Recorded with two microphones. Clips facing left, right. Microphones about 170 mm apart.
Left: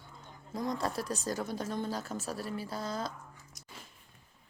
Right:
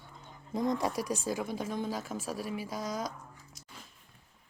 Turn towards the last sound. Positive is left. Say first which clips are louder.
# right 1 dB
turn(degrees=-10)  # may be behind; listen again after turning